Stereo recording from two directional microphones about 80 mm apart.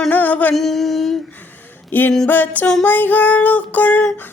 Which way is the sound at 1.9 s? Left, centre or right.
Left.